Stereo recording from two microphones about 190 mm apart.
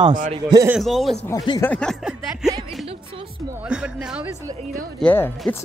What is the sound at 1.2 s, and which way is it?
Speech, 20° left (ahead or behind).